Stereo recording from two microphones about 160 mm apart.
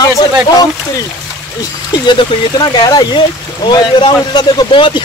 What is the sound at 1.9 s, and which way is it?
Speech, 30° left (ahead or behind).